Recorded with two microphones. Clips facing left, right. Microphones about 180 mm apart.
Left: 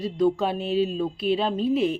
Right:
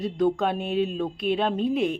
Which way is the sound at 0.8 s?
Centre (ahead or behind).